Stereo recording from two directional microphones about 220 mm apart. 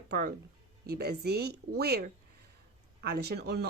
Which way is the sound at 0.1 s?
45° right (ahead or behind).